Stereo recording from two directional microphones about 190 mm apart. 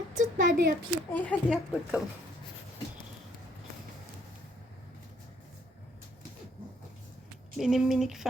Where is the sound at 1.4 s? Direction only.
5° right (ahead or behind).